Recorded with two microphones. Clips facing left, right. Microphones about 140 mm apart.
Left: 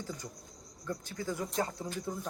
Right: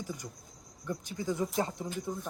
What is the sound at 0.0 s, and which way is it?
A woman's voice, 15° right (ahead or behind).